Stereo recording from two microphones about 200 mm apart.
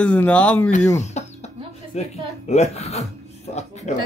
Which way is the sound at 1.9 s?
35° left (ahead or behind).